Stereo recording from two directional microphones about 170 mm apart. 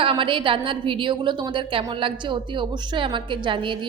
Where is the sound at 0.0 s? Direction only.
30° right (ahead or behind).